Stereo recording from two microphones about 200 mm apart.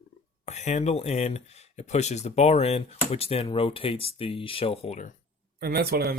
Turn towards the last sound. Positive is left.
turn(degrees=-50)  # may be behind; listen again after turning